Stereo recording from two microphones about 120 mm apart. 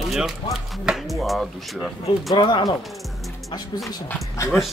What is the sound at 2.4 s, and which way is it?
Speech, 40° left (ahead or behind).